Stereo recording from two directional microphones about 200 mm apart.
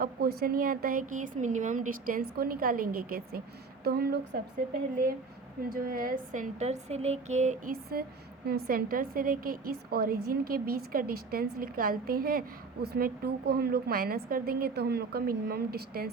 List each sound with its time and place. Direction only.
0.0 s a woman's voice: 50° right (ahead or behind)
5.6 s a woman's voice: 45° right (ahead or behind)